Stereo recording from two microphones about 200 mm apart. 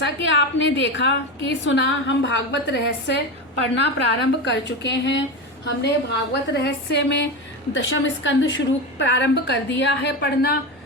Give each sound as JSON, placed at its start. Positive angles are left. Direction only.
{"t": 0.0, "sound": "a woman's voice", "side_deg": 60}